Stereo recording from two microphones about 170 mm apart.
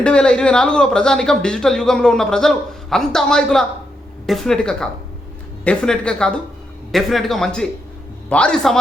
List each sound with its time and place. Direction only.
0.0 s speech: 5° left (ahead or behind)